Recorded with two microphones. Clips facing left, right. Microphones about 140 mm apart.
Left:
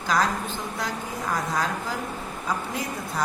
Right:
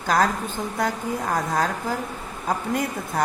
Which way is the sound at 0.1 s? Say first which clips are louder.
Right 3 dB; 50° right (ahead or behind).